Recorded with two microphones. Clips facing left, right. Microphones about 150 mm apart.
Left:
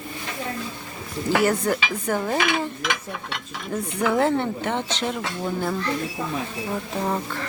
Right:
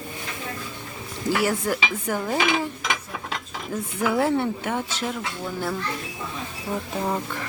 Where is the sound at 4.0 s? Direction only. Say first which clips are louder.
Left 1 dB; 5° right (ahead or behind).